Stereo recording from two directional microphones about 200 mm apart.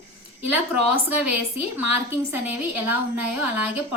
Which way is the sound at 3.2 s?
5° right (ahead or behind).